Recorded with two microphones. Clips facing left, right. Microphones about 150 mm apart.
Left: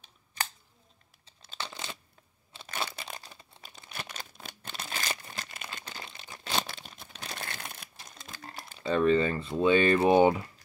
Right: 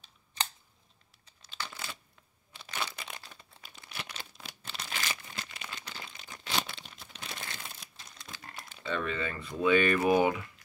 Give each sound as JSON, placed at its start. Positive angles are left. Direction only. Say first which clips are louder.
{"t": 1.5, "sound": "a sound", "louder": "left 2 dB", "side_deg": 25}
{"t": 2.5, "sound": "crunch", "louder": "left 2 dB", "side_deg": 30}
{"t": 3.6, "sound": "crumpling", "louder": "left 2 dB", "side_deg": 45}
{"t": 4.8, "sound": "crumpling", "louder": "left 2 dB", "side_deg": 40}
{"t": 6.4, "sound": "a sound", "louder": "left 2 dB", "side_deg": 45}
{"t": 7.3, "sound": "crumpling", "louder": "left 3 dB", "side_deg": 60}
{"t": 8.6, "sound": "speech", "louder": "left 10 dB", "side_deg": 35}